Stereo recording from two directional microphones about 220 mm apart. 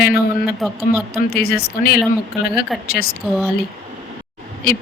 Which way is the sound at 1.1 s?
45° left (ahead or behind).